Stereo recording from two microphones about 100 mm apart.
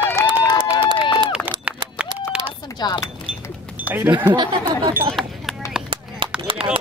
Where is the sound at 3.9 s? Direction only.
20° right (ahead or behind).